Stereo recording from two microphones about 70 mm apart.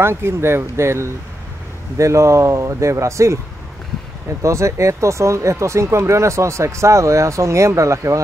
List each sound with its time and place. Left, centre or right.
0.0 s speech: right
4.4 s speech: right